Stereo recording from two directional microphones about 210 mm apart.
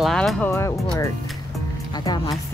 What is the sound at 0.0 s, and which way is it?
Speech, centre (ahead or behind).